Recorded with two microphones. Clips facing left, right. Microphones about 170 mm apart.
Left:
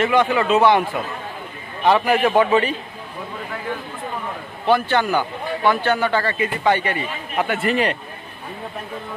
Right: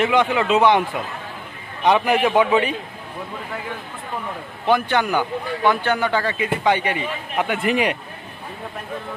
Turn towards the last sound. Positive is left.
turn(degrees=-10)  # may be behind; listen again after turning